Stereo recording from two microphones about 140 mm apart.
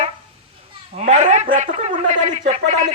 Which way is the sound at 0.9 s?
55° right (ahead or behind).